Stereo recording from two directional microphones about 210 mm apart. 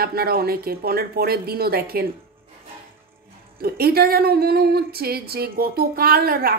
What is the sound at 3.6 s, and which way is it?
Speech, 45° right (ahead or behind).